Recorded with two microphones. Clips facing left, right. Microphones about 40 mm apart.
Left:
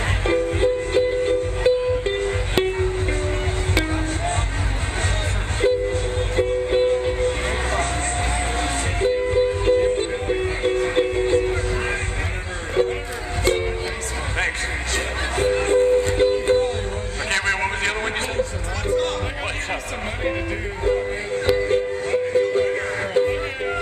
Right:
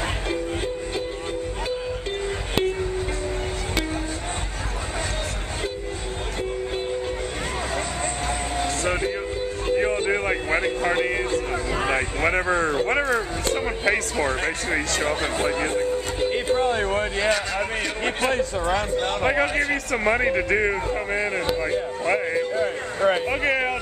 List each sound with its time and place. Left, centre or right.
0.3 s music: left
6.3 s music: left
6.9 s music: left
9.0 s music: left
18.0 s a sound: right